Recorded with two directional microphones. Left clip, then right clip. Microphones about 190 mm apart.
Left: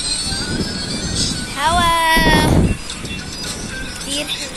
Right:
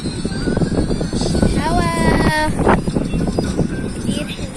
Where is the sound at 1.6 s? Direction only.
10° right (ahead or behind); by 2.5 s 25° right (ahead or behind).